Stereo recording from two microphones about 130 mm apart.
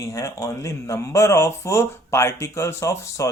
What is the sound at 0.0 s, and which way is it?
Speech, 25° left (ahead or behind).